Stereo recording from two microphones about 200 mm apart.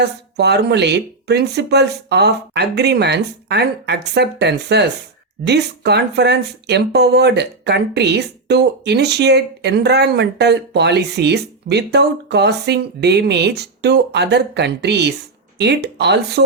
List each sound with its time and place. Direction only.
0.0 s speech: 55° right (ahead or behind)